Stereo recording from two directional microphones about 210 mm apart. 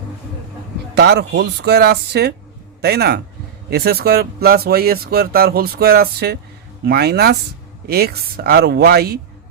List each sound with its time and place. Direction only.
0.9 s speech: 50° right (ahead or behind)